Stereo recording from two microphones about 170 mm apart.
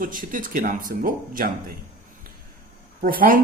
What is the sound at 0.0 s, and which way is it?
Speech, 55° right (ahead or behind).